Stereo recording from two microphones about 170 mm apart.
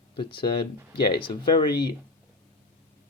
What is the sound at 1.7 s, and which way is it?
Speech, 70° left (ahead or behind).